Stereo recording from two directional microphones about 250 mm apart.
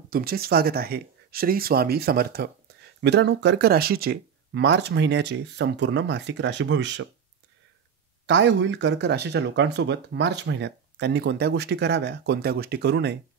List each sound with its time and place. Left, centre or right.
0.1 s speech: right
8.3 s speech: right